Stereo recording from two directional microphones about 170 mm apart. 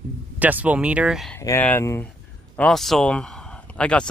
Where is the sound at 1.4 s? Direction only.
15° left (ahead or behind).